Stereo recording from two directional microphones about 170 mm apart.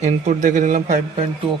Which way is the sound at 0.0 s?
45° right (ahead or behind).